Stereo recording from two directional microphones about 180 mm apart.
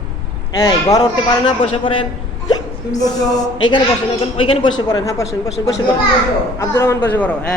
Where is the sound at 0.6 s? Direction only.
20° left (ahead or behind).